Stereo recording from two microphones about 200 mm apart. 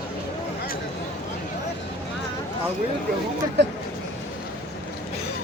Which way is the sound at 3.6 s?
60° right (ahead or behind).